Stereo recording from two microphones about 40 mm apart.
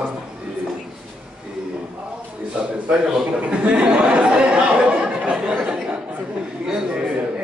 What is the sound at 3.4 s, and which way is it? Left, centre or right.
Speech, right.